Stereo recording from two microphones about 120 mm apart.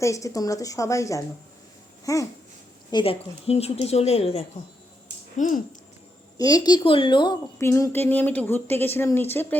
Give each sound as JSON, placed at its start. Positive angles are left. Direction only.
{"t": 0.0, "sound": "a woman's voice", "side_deg": 25}
{"t": 2.9, "sound": "a woman's voice", "side_deg": 50}
{"t": 5.4, "sound": "speech", "side_deg": 90}
{"t": 6.3, "sound": "a woman's voice", "side_deg": 30}
{"t": 7.6, "sound": "speech", "side_deg": 20}